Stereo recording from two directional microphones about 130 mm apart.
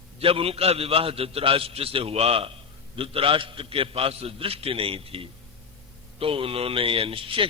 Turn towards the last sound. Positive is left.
turn(degrees=-45)  # may be behind; listen again after turning